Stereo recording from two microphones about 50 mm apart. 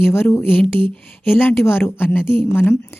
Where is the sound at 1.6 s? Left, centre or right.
Left.